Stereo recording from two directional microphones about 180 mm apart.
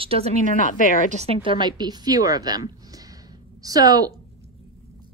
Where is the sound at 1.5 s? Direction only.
25° right (ahead or behind).